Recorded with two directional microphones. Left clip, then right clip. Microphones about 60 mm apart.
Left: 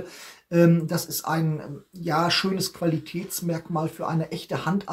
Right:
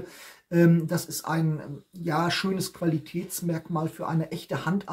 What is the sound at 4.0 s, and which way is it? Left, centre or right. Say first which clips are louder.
Speech: left 2 dB; right.